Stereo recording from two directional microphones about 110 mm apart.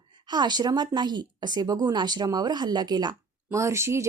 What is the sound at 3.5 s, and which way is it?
Speech, 25° right (ahead or behind).